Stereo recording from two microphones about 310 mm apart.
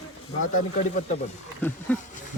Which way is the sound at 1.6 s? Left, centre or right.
Centre.